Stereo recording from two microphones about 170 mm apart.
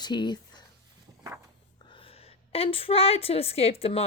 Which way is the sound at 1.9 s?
35° left (ahead or behind).